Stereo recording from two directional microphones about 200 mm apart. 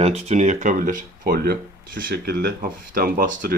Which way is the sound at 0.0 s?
30° right (ahead or behind).